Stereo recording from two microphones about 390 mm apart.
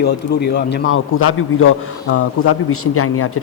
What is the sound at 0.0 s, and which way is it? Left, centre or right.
A man's voice, left.